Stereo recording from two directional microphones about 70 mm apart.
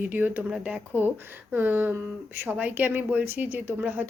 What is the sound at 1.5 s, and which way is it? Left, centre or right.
Speech, right.